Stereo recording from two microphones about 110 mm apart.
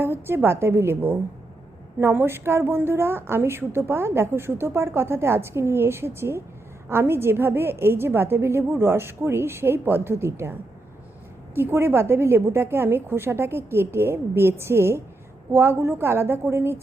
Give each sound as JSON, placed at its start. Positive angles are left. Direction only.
{"t": 0.0, "sound": "a woman's voice", "side_deg": -20}